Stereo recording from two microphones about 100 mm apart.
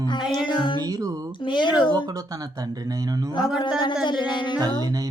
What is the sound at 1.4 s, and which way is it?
Speech, 50° left (ahead or behind).